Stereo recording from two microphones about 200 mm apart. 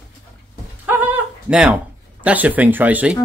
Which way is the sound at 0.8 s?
10° right (ahead or behind).